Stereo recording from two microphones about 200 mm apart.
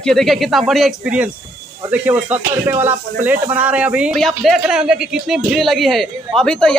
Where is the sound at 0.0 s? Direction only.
Centre (ahead or behind).